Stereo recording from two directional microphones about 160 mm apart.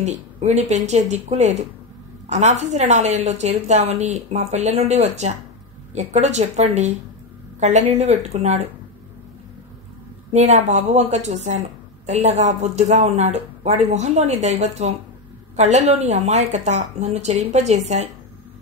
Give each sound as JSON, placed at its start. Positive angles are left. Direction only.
{"t": 0.0, "sound": "a woman's voice", "side_deg": -45}
{"t": 10.3, "sound": "a woman's voice", "side_deg": -45}